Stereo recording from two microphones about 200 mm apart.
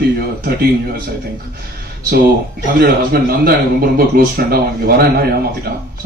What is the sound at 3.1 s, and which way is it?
A man's voice, 50° right (ahead or behind).